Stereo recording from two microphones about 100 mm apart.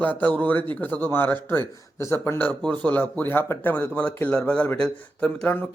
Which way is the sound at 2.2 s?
15° left (ahead or behind).